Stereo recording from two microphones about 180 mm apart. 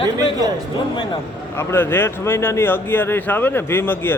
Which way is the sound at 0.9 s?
25° left (ahead or behind).